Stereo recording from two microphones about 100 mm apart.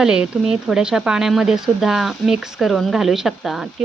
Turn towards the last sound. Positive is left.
turn(degrees=0)  # may be behind; listen again after turning